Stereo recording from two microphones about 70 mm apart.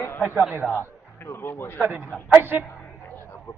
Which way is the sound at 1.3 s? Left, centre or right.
Left.